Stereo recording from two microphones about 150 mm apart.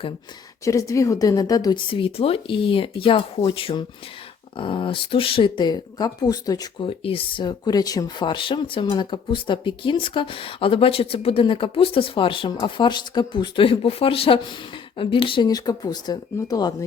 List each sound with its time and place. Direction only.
0.6 s speech: 20° left (ahead or behind)